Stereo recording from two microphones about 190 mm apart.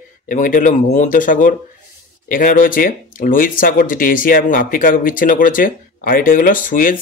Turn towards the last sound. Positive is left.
turn(degrees=45)  # may be behind; listen again after turning